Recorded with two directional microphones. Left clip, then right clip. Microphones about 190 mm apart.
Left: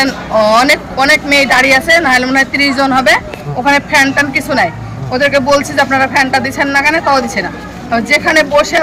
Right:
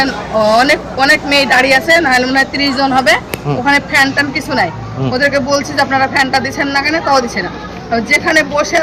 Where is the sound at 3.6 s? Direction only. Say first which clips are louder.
Left 2 dB; 20° left (ahead or behind).